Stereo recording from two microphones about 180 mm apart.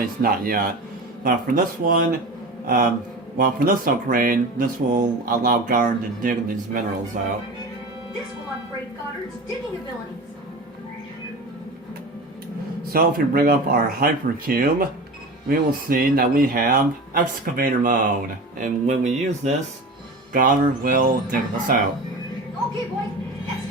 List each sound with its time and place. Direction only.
0.0 s speech: 55° right (ahead or behind)
12.9 s speech: 55° right (ahead or behind)